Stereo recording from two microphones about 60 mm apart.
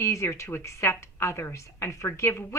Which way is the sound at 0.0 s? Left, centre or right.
Left.